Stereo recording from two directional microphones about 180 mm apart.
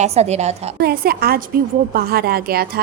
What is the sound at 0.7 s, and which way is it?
A woman's voice, 55° right (ahead or behind).